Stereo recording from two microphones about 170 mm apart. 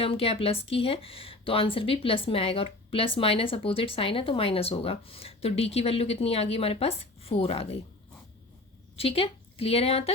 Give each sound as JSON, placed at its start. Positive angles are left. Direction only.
{"t": 0.0, "sound": "a woman's voice", "side_deg": 35}
{"t": 9.0, "sound": "a woman's voice", "side_deg": 35}